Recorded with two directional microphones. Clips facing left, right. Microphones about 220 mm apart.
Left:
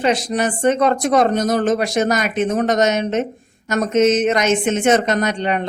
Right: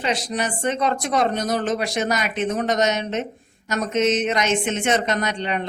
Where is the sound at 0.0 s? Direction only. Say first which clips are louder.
Left 6 dB; 50° left (ahead or behind).